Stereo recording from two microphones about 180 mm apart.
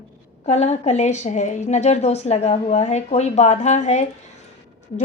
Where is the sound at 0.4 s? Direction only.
35° left (ahead or behind).